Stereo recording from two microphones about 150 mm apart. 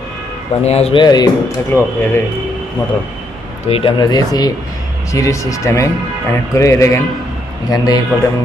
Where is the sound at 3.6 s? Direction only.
40° left (ahead or behind).